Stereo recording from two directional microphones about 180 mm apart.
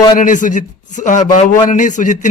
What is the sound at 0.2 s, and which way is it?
A man's voice, 45° left (ahead or behind).